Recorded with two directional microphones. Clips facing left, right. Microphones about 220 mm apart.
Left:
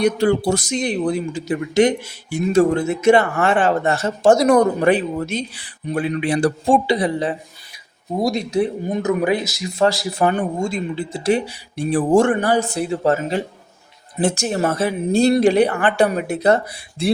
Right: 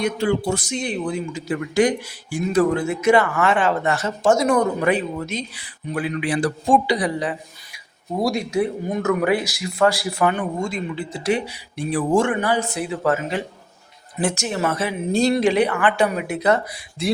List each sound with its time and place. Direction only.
0.0 s speech: 35° left (ahead or behind)
3.5 s a woman's voice: 50° left (ahead or behind)
3.8 s speech: 30° left (ahead or behind)
10.2 s speech: 35° left (ahead or behind)
11.9 s speech: 40° left (ahead or behind)
14.4 s speech: 40° left (ahead or behind)
15.9 s speech: 40° left (ahead or behind)